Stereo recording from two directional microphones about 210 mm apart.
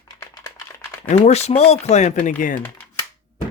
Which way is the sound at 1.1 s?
30° left (ahead or behind).